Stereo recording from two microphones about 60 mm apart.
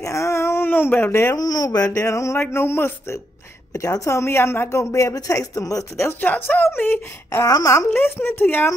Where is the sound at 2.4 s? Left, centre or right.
Left.